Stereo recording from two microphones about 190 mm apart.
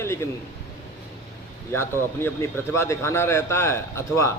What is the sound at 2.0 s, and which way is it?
A man's voice, 10° left (ahead or behind).